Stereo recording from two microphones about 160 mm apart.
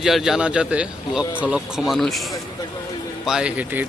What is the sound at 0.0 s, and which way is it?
A man's voice, centre (ahead or behind).